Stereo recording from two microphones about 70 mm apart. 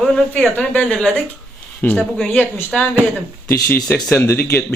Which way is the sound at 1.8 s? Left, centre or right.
Left.